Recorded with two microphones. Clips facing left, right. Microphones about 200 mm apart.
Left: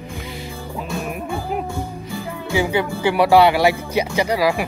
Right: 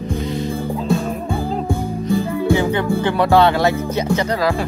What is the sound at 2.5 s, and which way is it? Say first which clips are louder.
Speech: right 2 dB; 10° left (ahead or behind).